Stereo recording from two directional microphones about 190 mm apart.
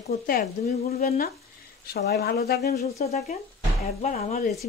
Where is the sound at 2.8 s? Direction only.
35° left (ahead or behind).